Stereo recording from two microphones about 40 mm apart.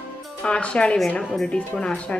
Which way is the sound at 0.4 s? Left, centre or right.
Left.